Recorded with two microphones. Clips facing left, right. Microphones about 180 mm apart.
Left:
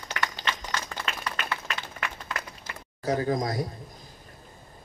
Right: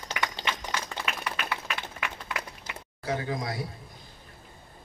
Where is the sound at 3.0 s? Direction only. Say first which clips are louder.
Left 5 dB; 40° left (ahead or behind).